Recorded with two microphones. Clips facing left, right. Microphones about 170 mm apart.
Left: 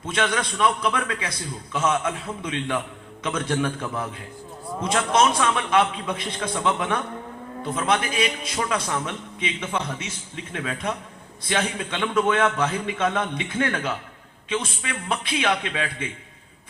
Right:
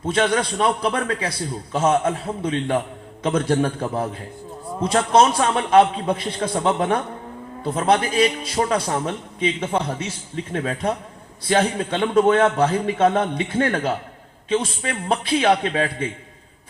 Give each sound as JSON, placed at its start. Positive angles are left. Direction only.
{"t": 0.0, "sound": "a man's voice", "side_deg": -35}